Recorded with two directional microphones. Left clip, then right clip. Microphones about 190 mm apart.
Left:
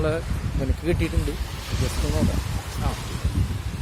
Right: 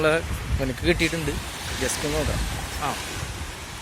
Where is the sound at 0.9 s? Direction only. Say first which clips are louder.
Right 4 dB; 10° left (ahead or behind).